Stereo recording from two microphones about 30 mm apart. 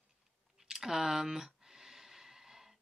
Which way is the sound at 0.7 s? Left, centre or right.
Centre.